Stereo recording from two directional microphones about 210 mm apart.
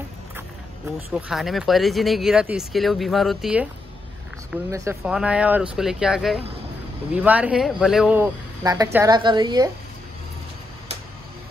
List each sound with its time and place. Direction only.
1.1 s speech: centre (ahead or behind)
4.6 s speech: 15° right (ahead or behind)
8.6 s speech: 15° right (ahead or behind)